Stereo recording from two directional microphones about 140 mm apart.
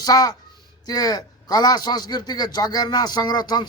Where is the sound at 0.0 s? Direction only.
25° left (ahead or behind).